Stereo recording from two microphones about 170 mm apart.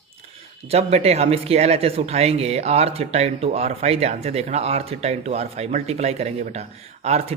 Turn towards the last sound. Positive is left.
turn(degrees=-40)  # may be behind; listen again after turning